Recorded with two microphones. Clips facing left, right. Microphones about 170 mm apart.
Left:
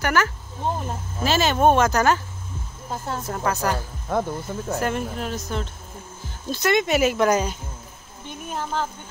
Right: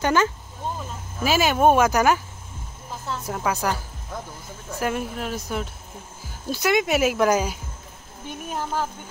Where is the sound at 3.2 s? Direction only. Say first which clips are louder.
Even; 10° right (ahead or behind).